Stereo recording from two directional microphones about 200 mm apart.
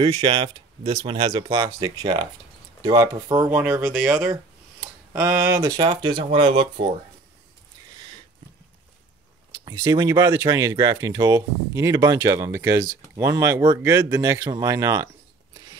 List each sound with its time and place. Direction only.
0.0 s speech: 25° right (ahead or behind)
9.7 s speech: 20° right (ahead or behind)